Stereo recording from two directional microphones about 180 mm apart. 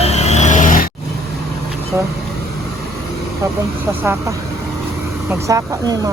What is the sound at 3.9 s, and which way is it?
Speech, 10° right (ahead or behind).